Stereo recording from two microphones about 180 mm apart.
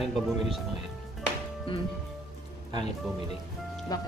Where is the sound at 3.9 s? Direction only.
20° left (ahead or behind).